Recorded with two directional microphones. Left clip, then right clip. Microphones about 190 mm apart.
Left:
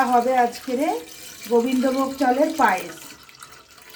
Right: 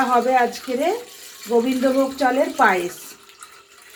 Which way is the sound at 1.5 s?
40° right (ahead or behind).